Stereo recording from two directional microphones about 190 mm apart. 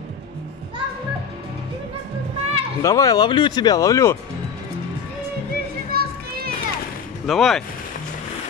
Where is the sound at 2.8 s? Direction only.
15° left (ahead or behind).